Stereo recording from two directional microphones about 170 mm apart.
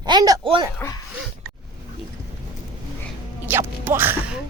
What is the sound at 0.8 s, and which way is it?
Dog, 15° left (ahead or behind).